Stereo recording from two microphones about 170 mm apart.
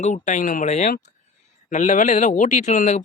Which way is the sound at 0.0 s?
45° left (ahead or behind).